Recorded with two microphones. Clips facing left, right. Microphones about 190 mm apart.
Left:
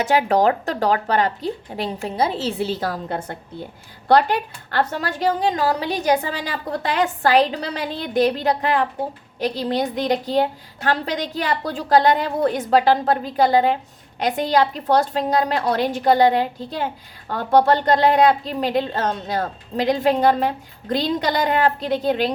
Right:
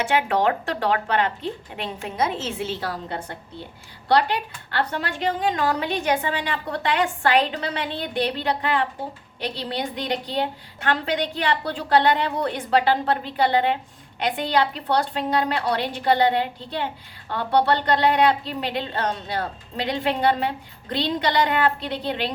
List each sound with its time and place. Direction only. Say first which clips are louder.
0.0 s a woman's voice: left 4 dB; 40° left (ahead or behind)